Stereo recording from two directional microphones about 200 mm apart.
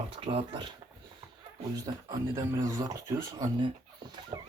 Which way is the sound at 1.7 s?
15° right (ahead or behind).